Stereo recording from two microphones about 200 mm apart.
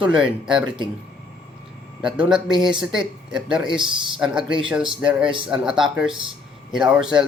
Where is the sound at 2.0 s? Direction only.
5° right (ahead or behind).